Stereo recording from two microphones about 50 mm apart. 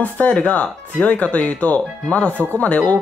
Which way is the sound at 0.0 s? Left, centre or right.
Left.